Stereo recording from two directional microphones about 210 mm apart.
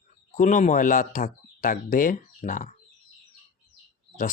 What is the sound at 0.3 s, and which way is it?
A man's voice, 35° left (ahead or behind).